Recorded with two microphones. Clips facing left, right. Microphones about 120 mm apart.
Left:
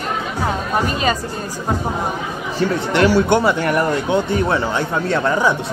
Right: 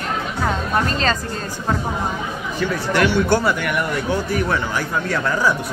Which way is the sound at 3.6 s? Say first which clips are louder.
Left 4 dB; 35° left (ahead or behind).